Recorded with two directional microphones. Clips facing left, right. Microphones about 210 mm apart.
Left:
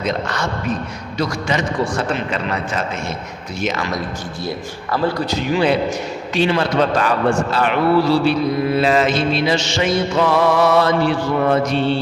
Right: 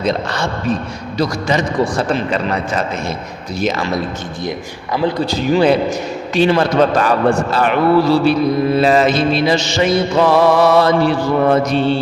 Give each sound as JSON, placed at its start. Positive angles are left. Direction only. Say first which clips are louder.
{"t": 0.0, "sound": "mantra", "louder": "right 3 dB", "side_deg": -30}
{"t": 3.6, "sound": "mantra", "louder": "right 4 dB", "side_deg": -35}
{"t": 4.4, "sound": "speech", "louder": "right 1 dB", "side_deg": -15}
{"t": 5.2, "sound": "mantra", "louder": "right 4 dB", "side_deg": -35}